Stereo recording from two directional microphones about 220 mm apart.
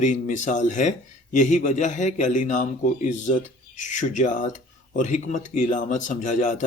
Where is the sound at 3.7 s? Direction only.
35° left (ahead or behind).